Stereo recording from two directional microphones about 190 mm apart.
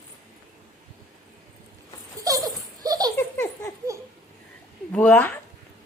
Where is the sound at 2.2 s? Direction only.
20° right (ahead or behind).